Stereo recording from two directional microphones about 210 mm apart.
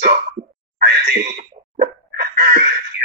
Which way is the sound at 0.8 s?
50° right (ahead or behind).